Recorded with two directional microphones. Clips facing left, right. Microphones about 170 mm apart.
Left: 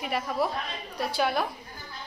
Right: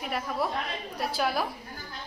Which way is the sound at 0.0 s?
Centre (ahead or behind).